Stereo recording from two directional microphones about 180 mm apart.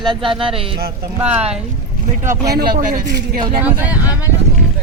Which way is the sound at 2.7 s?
55° right (ahead or behind).